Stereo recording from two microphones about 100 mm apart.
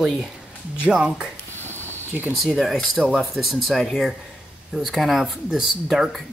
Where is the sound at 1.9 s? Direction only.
20° right (ahead or behind).